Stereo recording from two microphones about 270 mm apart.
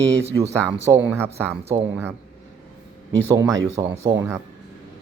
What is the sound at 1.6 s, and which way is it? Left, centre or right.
Speech, right.